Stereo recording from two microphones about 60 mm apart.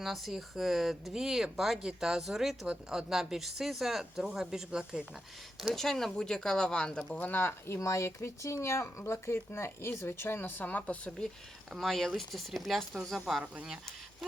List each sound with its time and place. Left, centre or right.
0.0 s speech: centre
2.6 s speech: centre
5.5 s speech: centre
7.2 s speech: left
7.8 s speech: left
11.8 s speech: centre